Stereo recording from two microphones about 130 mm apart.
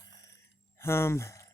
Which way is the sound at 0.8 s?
20° left (ahead or behind).